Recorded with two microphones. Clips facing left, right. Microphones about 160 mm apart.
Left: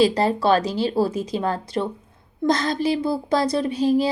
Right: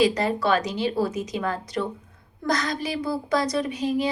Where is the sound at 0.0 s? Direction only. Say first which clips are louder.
Left 3 dB; 30° left (ahead or behind).